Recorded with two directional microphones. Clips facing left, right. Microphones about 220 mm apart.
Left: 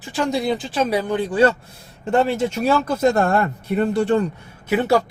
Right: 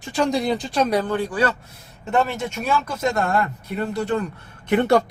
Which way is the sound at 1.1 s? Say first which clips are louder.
Left 5 dB; 25° left (ahead or behind).